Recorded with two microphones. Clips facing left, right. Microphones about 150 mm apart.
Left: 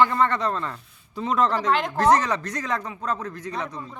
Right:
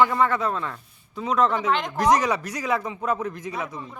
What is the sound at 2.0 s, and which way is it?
A man's voice, 10° right (ahead or behind).